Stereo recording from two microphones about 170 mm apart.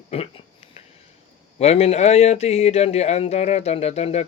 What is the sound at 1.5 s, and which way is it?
Speech, 40° left (ahead or behind).